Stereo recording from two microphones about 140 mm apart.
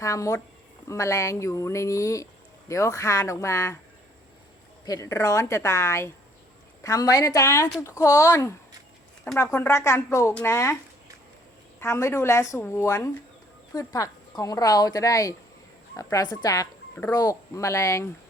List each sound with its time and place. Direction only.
0.0 s a woman's voice: 20° left (ahead or behind)
4.9 s a woman's voice: 25° left (ahead or behind)
11.8 s a woman's voice: 20° left (ahead or behind)